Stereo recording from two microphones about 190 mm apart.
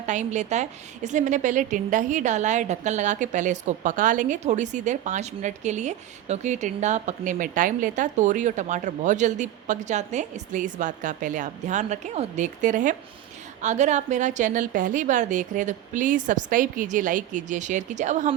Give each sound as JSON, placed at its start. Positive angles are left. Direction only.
{"t": 0.0, "sound": "a woman's voice", "side_deg": -40}